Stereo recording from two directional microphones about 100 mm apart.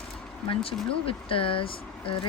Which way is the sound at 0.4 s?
65° left (ahead or behind).